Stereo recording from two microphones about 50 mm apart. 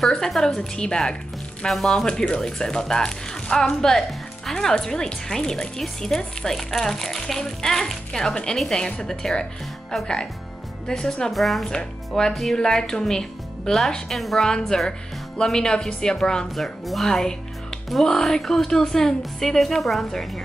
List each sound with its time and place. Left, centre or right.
0.1 s speech: centre
11.3 s speech: centre
16.5 s speech: centre